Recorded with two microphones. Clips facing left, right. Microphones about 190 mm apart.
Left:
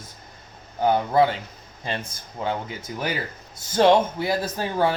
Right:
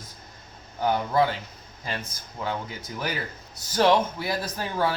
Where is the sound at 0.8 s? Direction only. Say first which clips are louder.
Left 4 dB; 20° left (ahead or behind).